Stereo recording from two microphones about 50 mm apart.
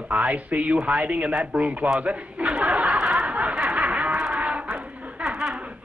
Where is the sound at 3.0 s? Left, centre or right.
Centre.